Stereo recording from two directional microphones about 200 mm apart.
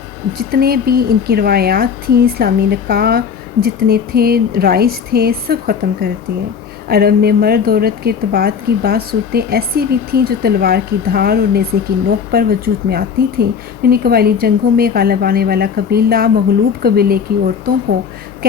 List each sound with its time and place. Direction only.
0.3 s a woman's voice: 50° right (ahead or behind)